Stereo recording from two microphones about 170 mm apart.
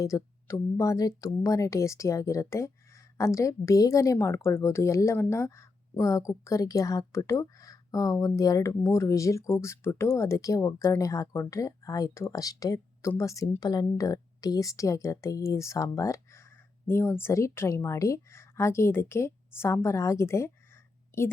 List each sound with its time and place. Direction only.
0.0 s a woman's voice: 20° left (ahead or behind)